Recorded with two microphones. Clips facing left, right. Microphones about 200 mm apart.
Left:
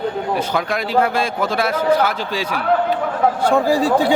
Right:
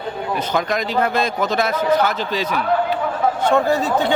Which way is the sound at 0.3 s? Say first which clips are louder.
Even; 10° left (ahead or behind).